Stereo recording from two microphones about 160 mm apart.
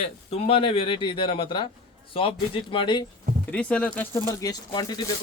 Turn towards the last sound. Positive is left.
turn(degrees=25)  # may be behind; listen again after turning